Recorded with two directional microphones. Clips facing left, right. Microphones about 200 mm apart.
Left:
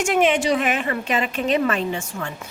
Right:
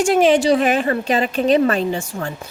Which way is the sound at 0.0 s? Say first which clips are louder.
Right 5 dB; 35° right (ahead or behind).